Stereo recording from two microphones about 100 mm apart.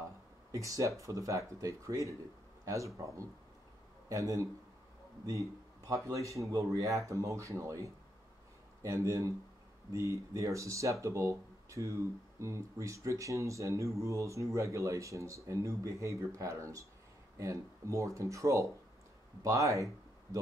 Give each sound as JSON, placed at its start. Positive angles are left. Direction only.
{"t": 0.0, "sound": "speech", "side_deg": -35}
{"t": 4.1, "sound": "speech", "side_deg": -30}